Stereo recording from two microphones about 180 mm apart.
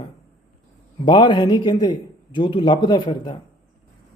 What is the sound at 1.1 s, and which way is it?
Speech, 25° left (ahead or behind).